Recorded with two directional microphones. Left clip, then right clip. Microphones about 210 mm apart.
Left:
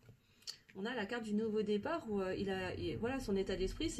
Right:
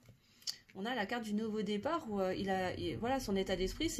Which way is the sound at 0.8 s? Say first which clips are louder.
Right 3 dB; 40° right (ahead or behind).